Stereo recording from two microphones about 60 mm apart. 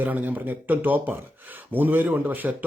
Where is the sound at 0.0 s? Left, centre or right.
Right.